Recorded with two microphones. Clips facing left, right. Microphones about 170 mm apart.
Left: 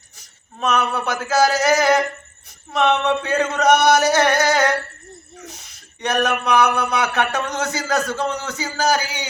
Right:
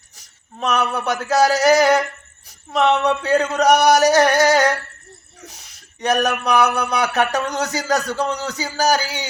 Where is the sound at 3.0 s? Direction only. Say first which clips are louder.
Right 2 dB; 35° right (ahead or behind).